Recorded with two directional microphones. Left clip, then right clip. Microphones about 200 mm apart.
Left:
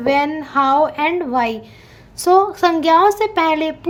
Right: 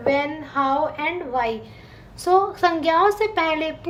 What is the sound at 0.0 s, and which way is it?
A woman's voice, 40° left (ahead or behind).